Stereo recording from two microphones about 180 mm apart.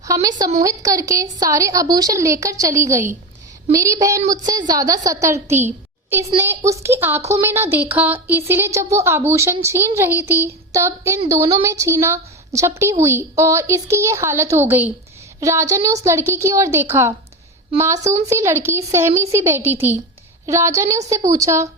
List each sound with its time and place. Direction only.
0.0 s a woman's voice: 20° right (ahead or behind)